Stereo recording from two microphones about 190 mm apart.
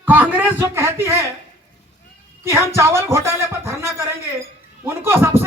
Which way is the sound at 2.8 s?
15° right (ahead or behind).